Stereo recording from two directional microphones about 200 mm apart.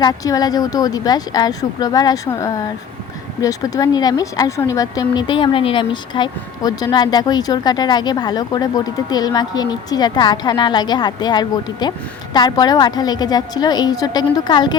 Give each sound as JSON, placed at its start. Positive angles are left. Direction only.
{"t": 0.0, "sound": "speech", "side_deg": 20}